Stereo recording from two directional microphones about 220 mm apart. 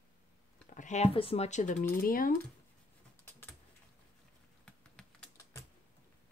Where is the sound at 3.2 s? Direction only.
10° left (ahead or behind).